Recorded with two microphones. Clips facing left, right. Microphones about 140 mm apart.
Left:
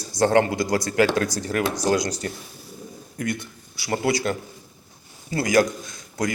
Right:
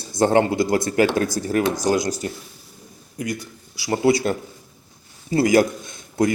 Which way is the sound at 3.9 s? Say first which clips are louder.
Right 4 dB; 25° right (ahead or behind).